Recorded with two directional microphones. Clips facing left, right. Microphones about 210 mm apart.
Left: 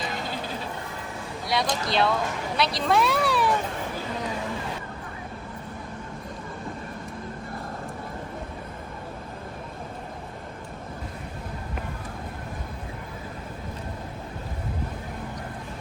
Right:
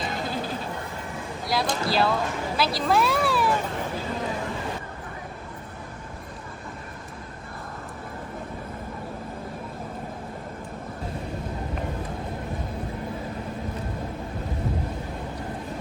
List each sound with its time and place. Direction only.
1.5 s speech: centre (ahead or behind)